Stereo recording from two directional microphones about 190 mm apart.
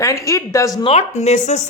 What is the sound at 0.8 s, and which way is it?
Speech, 30° left (ahead or behind).